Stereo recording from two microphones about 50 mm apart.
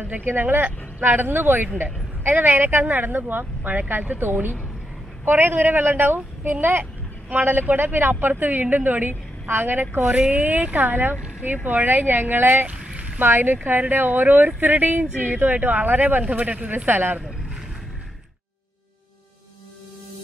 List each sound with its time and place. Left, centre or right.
0.0 s speech: right
16.9 s speech: right